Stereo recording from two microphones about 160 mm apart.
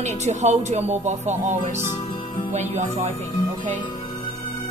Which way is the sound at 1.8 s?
45° left (ahead or behind).